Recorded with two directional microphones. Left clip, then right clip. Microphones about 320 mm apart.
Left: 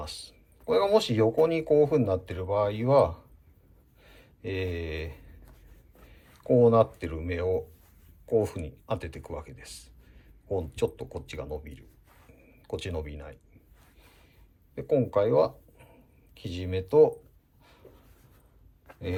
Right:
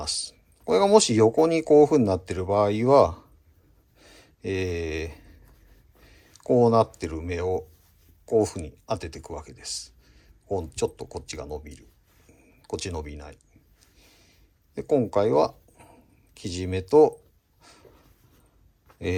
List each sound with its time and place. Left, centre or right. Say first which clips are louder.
0.0 s speech: right 9 dB; centre
3.9 s a sound: right 4 dB; centre
6.5 s speech: right 1 dB; centre
14.8 s speech: right 2 dB; centre